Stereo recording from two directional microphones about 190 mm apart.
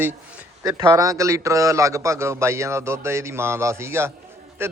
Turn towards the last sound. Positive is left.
turn(degrees=-10)  # may be behind; listen again after turning